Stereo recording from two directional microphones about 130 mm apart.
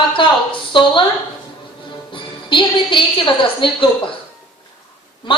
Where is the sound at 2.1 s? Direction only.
40° left (ahead or behind).